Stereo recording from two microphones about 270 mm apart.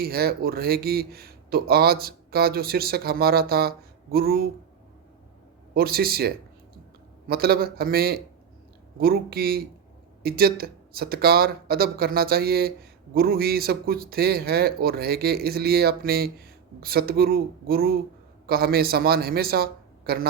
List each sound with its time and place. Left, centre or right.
0.0 s a man's voice: right
5.7 s a man's voice: right